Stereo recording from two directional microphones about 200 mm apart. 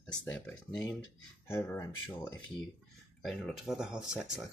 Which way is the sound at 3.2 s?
Centre (ahead or behind).